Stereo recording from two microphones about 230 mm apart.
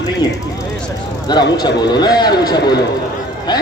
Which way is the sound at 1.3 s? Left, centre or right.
Centre.